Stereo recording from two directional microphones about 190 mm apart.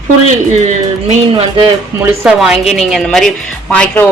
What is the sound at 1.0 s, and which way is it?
Music, 25° right (ahead or behind).